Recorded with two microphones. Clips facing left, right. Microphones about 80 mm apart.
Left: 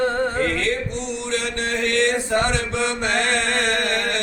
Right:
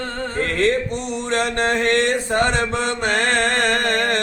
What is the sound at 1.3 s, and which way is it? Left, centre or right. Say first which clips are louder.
Mantra: right 6 dB; right.